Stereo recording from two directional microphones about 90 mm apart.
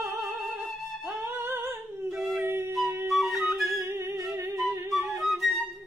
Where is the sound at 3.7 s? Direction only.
30° right (ahead or behind).